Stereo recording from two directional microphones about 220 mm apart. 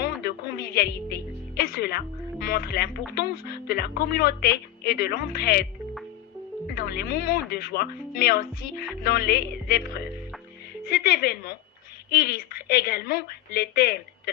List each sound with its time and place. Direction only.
0.0 s music: 45° left (ahead or behind)
1.6 s speech: 45° left (ahead or behind)
6.7 s speech: 45° left (ahead or behind)